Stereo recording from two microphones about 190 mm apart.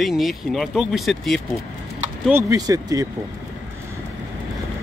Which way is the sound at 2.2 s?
15° right (ahead or behind).